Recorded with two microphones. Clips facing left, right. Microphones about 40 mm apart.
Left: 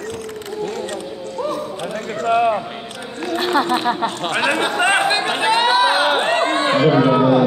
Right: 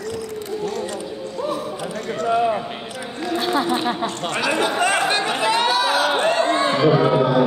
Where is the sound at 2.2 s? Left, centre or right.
Left.